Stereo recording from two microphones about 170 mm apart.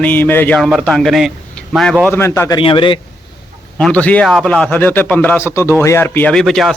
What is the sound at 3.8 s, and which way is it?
A man's voice, 10° left (ahead or behind).